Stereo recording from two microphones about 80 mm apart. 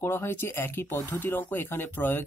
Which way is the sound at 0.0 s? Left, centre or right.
Left.